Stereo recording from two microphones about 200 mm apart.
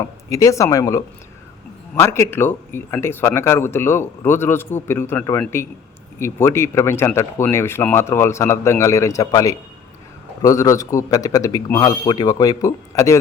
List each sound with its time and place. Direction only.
0.0 s speech: 15° left (ahead or behind)